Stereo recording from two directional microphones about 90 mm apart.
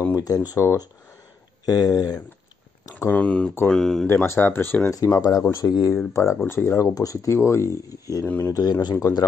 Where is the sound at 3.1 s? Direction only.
15° left (ahead or behind).